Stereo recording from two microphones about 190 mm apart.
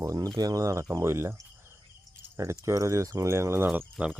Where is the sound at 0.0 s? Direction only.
20° right (ahead or behind).